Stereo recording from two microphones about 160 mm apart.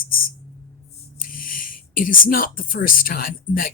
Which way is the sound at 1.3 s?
60° left (ahead or behind).